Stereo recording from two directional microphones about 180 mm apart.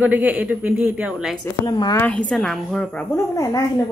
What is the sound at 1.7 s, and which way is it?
Speech, 20° left (ahead or behind).